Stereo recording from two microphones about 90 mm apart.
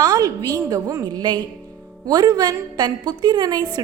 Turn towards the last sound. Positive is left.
turn(degrees=-50)  # may be behind; listen again after turning